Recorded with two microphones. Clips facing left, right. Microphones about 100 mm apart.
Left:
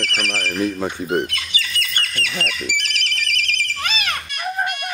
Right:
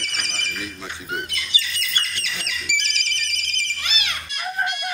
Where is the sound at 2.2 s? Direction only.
50° left (ahead or behind).